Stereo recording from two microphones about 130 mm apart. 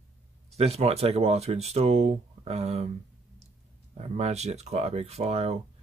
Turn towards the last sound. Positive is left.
turn(degrees=-55)  # may be behind; listen again after turning